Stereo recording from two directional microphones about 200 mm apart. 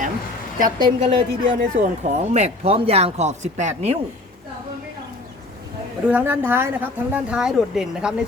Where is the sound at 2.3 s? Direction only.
30° right (ahead or behind).